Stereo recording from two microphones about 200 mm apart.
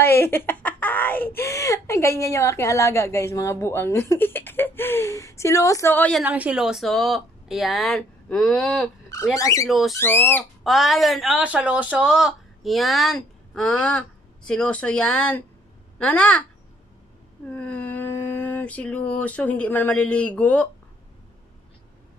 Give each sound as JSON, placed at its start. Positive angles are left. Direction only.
{"t": 0.0, "sound": "speech", "side_deg": 10}
{"t": 6.2, "sound": "speech", "side_deg": -5}
{"t": 9.1, "sound": "speech", "side_deg": 15}
{"t": 9.7, "sound": "speech", "side_deg": 0}
{"t": 9.9, "sound": "speech", "side_deg": 10}
{"t": 17.5, "sound": "a sound", "side_deg": 5}